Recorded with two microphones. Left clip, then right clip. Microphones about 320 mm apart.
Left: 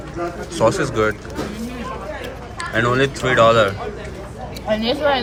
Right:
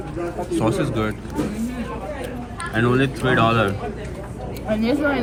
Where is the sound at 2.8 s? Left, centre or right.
Centre.